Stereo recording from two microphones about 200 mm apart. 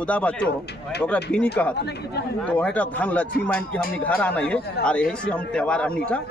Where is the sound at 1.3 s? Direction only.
5° left (ahead or behind).